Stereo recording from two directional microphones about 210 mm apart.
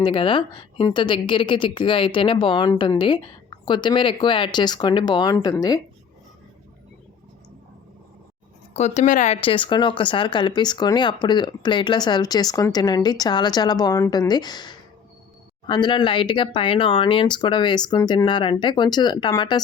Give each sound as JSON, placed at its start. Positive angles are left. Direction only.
{"t": 0.0, "sound": "speech", "side_deg": 25}
{"t": 8.7, "sound": "speech", "side_deg": 35}